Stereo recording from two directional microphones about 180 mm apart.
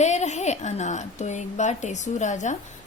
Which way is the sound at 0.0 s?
40° left (ahead or behind).